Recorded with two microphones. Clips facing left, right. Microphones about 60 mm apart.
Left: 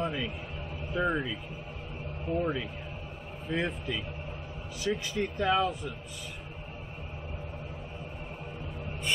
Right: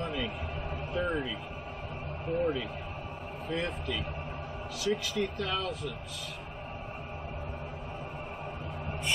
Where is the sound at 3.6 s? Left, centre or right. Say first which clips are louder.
Left 3 dB; centre.